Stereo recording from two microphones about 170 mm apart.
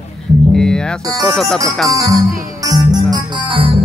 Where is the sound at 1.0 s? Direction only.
20° right (ahead or behind).